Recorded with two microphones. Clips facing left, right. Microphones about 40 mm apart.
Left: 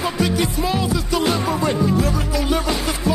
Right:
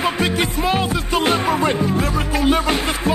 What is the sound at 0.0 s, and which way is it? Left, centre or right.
Music, right.